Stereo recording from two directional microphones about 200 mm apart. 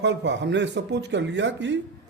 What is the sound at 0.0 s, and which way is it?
Speech, 60° right (ahead or behind).